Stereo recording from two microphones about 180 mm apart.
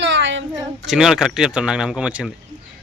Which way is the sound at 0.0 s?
90° right.